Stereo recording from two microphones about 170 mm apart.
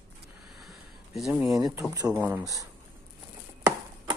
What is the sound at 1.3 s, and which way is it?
Speech, 20° right (ahead or behind).